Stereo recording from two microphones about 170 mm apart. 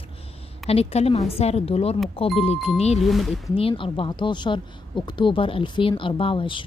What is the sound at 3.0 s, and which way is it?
Speech, centre (ahead or behind).